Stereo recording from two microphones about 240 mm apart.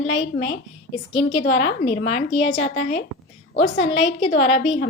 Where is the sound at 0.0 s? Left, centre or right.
Left.